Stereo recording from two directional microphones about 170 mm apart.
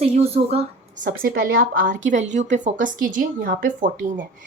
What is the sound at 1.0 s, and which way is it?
A woman's voice, 60° right (ahead or behind).